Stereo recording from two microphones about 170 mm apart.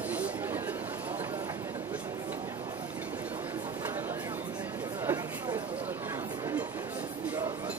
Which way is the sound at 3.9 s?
10° right (ahead or behind).